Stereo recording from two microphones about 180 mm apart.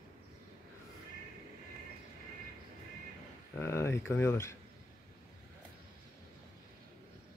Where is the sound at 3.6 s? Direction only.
15° left (ahead or behind).